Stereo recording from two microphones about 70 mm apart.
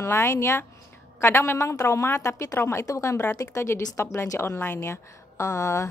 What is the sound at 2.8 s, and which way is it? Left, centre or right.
A woman's voice, left.